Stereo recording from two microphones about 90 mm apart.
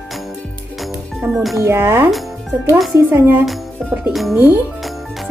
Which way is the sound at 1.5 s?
30° right (ahead or behind).